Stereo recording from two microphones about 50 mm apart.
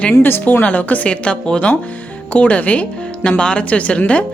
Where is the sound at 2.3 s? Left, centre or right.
Left.